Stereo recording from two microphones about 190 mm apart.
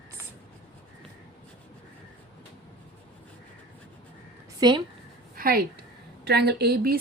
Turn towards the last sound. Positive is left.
turn(degrees=-55)  # may be behind; listen again after turning